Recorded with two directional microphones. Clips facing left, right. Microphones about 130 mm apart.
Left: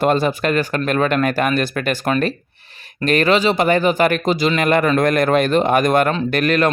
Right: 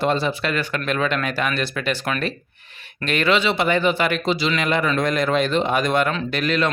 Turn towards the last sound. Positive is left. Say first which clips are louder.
# left 5 dB
turn(degrees=50)  # may be behind; listen again after turning